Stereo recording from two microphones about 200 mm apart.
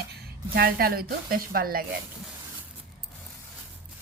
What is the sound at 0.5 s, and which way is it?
Speech, 50° right (ahead or behind).